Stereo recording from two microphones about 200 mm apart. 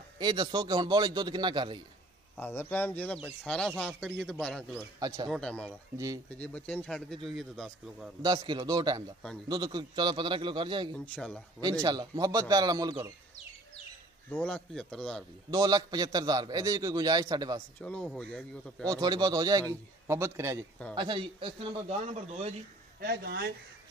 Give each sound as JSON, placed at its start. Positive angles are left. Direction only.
{"t": 0.2, "sound": "a man's voice", "side_deg": -20}
{"t": 2.3, "sound": "speech", "side_deg": 10}
{"t": 5.0, "sound": "a man's voice", "side_deg": -20}
{"t": 5.3, "sound": "speech", "side_deg": 5}
{"t": 8.2, "sound": "a man's voice", "side_deg": -20}
{"t": 11.1, "sound": "speech", "side_deg": 5}
{"t": 11.8, "sound": "a man's voice", "side_deg": -20}
{"t": 14.3, "sound": "speech", "side_deg": 5}
{"t": 15.5, "sound": "a man's voice", "side_deg": -20}
{"t": 17.7, "sound": "speech", "side_deg": 5}
{"t": 18.9, "sound": "a man's voice", "side_deg": -20}
{"t": 20.9, "sound": "a man's voice", "side_deg": -25}
{"t": 22.9, "sound": "a man's voice", "side_deg": -55}